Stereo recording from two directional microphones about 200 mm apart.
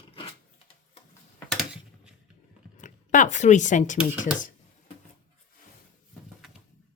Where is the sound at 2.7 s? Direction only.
40° left (ahead or behind).